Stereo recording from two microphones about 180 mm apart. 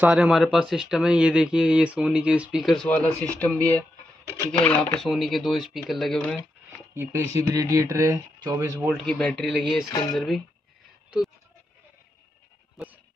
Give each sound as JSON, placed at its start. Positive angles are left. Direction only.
{"t": 0.0, "sound": "speech", "side_deg": -5}
{"t": 6.9, "sound": "a sound", "side_deg": -15}
{"t": 7.3, "sound": "speech", "side_deg": -20}
{"t": 8.8, "sound": "speech", "side_deg": 5}
{"t": 9.8, "sound": "speech", "side_deg": 20}
{"t": 10.1, "sound": "speech", "side_deg": 0}